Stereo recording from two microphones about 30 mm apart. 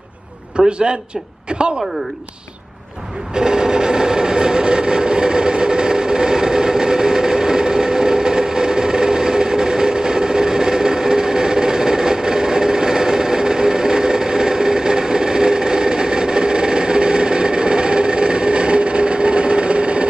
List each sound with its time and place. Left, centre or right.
0.6 s a sound: right
1.5 s speech: right
3.3 s train: right